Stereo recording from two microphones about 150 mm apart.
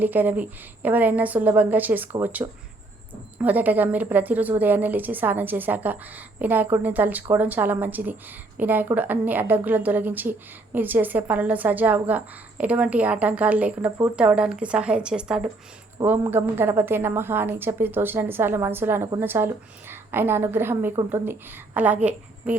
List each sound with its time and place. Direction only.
0.0 s a woman's voice: 10° right (ahead or behind)
2.4 s speech: 25° right (ahead or behind)
3.3 s a woman's voice: 10° right (ahead or behind)